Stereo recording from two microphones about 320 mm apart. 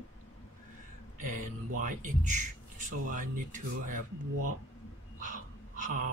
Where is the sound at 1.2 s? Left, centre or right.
Right.